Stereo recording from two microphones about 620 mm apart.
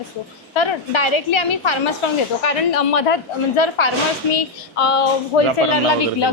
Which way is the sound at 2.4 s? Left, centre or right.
Left.